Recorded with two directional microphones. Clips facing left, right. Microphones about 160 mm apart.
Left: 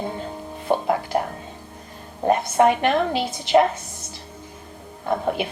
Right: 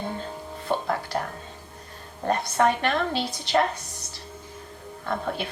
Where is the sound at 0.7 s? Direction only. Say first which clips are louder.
Left 5 dB; 15° left (ahead or behind).